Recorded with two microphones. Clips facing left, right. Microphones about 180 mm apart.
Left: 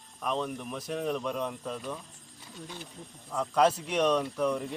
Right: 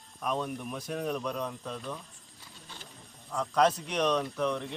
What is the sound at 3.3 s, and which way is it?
A man's voice, 5° left (ahead or behind).